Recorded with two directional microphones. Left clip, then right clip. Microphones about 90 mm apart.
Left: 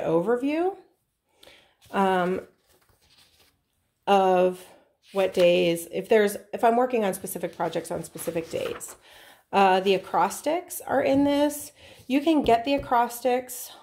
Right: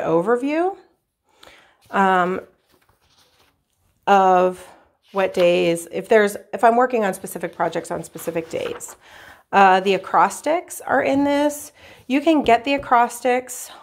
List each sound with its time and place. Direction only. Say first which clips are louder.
0.0 s a woman's voice: right 5 dB; 30° right (ahead or behind)
1.4 s a sound: right 5 dB; 25° right (ahead or behind)
4.0 s a woman's voice: right 6 dB; 25° right (ahead or behind)